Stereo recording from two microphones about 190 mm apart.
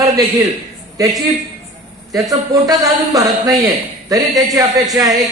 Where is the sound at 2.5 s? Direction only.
20° right (ahead or behind).